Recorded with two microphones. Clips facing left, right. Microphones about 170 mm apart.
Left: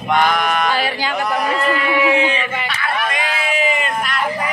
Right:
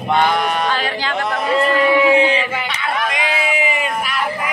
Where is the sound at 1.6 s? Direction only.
30° right (ahead or behind).